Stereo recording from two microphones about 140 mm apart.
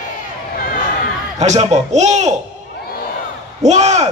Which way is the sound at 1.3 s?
55° right (ahead or behind).